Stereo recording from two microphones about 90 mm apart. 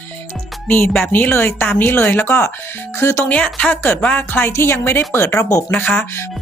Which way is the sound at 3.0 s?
35° left (ahead or behind).